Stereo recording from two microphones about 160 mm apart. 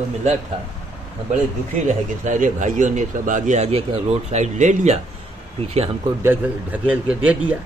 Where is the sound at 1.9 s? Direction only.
50° right (ahead or behind).